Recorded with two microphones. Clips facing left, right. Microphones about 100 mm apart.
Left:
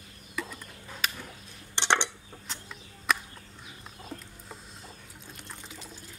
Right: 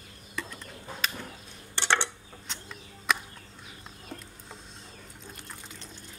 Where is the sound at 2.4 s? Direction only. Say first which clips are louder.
Right 1 dB; centre (ahead or behind).